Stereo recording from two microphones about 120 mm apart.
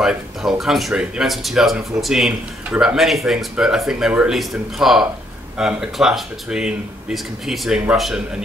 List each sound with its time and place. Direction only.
0.0 s speech: 5° right (ahead or behind)